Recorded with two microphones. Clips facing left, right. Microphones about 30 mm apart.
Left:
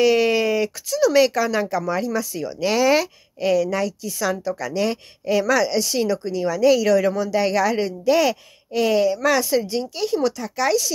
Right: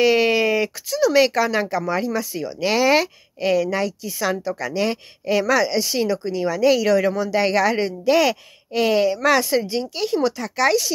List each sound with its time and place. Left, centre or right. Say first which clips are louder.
0.0 s speech: even; right
1.3 s speech: right 1 dB; right
7.2 s speech: right 1 dB; right
7.7 s speech: right 1 dB; right
10.3 s speech: right 3 dB; right